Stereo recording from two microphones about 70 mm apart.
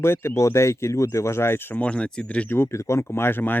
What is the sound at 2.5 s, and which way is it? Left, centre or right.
Speech, left.